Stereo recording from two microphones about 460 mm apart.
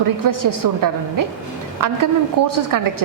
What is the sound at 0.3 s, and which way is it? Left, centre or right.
A woman's voice, right.